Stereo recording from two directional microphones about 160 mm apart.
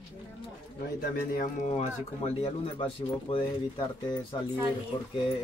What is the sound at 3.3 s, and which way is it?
Speech, 35° left (ahead or behind).